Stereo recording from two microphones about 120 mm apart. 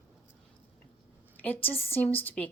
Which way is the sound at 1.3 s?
15° left (ahead or behind).